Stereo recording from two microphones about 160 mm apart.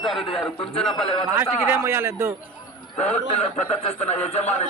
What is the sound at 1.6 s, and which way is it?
Speech, 15° right (ahead or behind).